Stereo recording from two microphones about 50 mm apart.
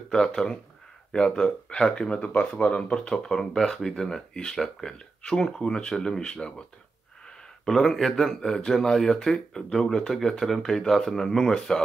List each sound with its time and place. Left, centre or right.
0.1 s speech: centre
7.6 s speech: centre